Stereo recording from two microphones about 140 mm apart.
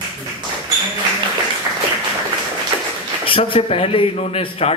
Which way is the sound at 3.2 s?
40° left (ahead or behind).